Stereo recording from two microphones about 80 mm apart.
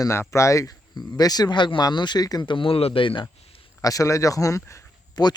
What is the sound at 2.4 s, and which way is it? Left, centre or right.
Speech, left.